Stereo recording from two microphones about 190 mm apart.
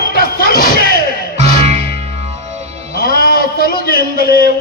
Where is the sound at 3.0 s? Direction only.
50° left (ahead or behind).